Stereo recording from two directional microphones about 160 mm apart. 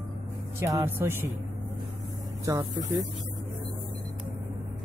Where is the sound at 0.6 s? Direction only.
15° right (ahead or behind).